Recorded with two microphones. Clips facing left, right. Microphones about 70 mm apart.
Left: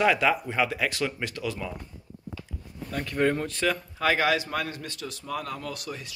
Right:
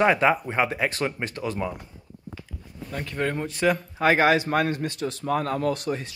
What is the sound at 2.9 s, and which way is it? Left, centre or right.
Speech, centre.